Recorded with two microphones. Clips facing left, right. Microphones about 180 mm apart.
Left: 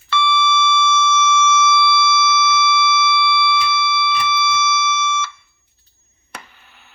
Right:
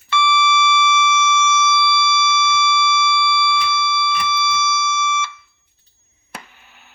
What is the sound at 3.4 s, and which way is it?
Fire alarm, 50° right (ahead or behind).